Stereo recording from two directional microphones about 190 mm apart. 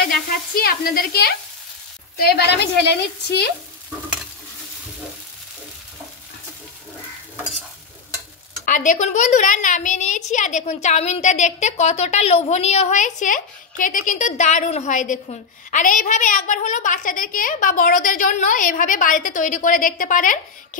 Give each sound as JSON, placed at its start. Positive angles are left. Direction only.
{"t": 0.1, "sound": "sizzle", "side_deg": 50}
{"t": 2.1, "sound": "a woman's voice", "side_deg": 55}
{"t": 8.6, "sound": "a woman's voice", "side_deg": 40}